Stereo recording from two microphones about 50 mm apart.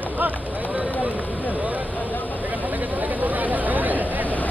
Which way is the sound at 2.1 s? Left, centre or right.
Left.